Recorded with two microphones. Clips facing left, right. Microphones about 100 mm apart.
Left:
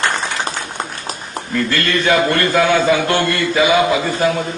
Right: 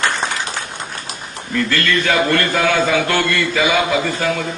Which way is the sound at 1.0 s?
40° left (ahead or behind).